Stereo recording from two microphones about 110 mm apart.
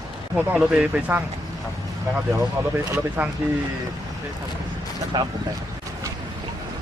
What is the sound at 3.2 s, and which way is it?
Speech, 15° right (ahead or behind).